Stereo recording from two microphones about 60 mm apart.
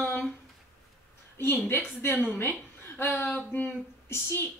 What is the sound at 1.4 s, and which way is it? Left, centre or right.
Speech, left.